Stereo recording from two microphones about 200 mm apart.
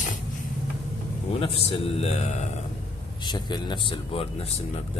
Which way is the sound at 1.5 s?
30° left (ahead or behind).